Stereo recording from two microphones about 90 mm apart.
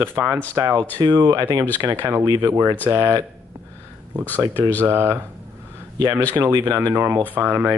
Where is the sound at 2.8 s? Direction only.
30° right (ahead or behind).